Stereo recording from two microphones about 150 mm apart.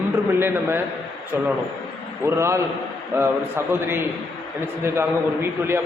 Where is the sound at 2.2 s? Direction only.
20° right (ahead or behind).